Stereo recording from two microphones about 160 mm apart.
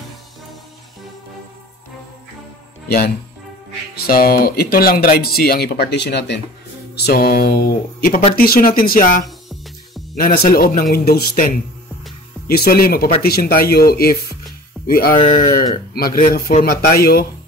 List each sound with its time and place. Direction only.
3.9 s speech: 70° left (ahead or behind); by 6.4 s 90° left
7.0 s speech: 70° left (ahead or behind)
15.1 s speech: 35° left (ahead or behind)
15.9 s speech: 65° left (ahead or behind)
17.0 s speech: 75° left (ahead or behind)